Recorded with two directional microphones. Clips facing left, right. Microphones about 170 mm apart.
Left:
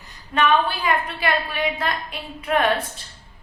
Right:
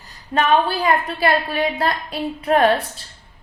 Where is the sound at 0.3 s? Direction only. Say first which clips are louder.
Right 2 dB; 35° right (ahead or behind).